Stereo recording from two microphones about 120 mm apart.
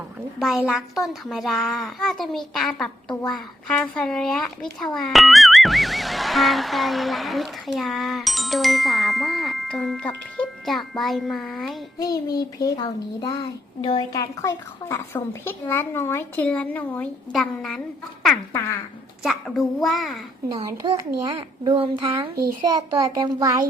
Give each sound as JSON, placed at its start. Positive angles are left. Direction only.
{"t": 0.3, "sound": "music", "side_deg": -5}
{"t": 11.9, "sound": "child singing", "side_deg": 30}
{"t": 13.8, "sound": "a woman's voice", "side_deg": 35}
{"t": 17.3, "sound": "music", "side_deg": 5}
{"t": 19.2, "sound": "music", "side_deg": 0}
{"t": 20.5, "sound": "a child's voice", "side_deg": -30}
{"t": 23.0, "sound": "a child's voice", "side_deg": -30}